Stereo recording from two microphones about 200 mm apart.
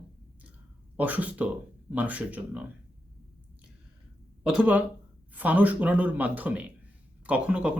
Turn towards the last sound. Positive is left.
turn(degrees=-5)  # may be behind; listen again after turning